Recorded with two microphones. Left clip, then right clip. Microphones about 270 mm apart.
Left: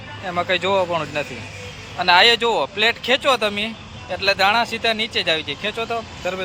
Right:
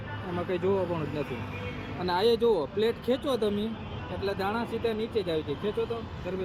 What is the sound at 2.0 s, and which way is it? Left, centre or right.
Speech, left.